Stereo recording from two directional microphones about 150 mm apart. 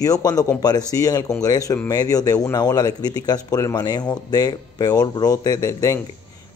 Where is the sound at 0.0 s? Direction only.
25° left (ahead or behind).